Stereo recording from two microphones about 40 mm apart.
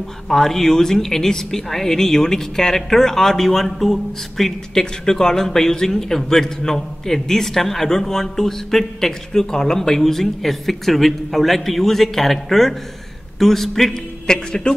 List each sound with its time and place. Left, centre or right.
0.3 s a man's voice: centre
14.2 s a man's voice: centre